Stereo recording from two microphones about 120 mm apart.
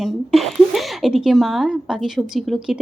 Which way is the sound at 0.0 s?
Centre (ahead or behind).